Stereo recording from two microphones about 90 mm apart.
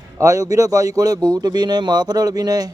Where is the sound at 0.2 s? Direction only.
40° right (ahead or behind).